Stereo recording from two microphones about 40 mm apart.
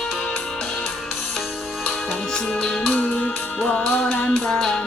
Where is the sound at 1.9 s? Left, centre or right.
Centre.